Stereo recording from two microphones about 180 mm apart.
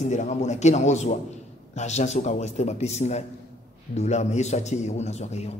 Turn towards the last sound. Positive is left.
turn(degrees=35)  # may be behind; listen again after turning